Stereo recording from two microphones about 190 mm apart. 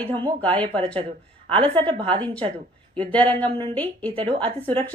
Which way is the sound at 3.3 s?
25° right (ahead or behind).